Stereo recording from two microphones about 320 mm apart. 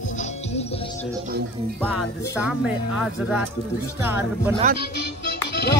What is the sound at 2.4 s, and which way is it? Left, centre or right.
A man's voice, centre.